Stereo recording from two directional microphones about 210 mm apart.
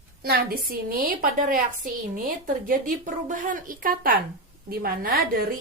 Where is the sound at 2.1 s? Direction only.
40° right (ahead or behind).